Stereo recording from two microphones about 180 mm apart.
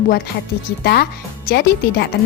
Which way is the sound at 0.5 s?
60° left (ahead or behind).